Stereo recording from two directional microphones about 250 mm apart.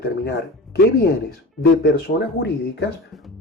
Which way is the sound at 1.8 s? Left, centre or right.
Left.